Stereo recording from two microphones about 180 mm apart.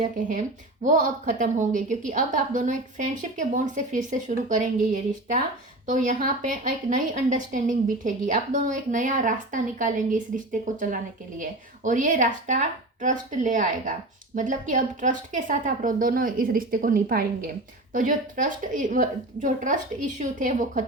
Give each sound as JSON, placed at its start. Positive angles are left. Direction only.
{"t": 0.3, "sound": "a woman's voice", "side_deg": -45}